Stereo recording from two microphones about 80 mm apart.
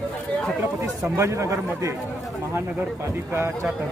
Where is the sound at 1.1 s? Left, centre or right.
Right.